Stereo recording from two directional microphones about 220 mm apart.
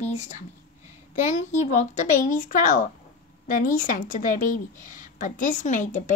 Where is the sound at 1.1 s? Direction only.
35° left (ahead or behind).